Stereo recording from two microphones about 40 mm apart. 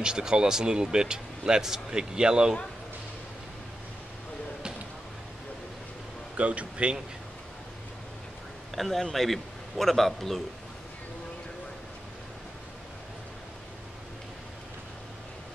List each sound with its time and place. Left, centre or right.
0.0 s speech: centre
6.3 s speech: right
8.7 s speech: centre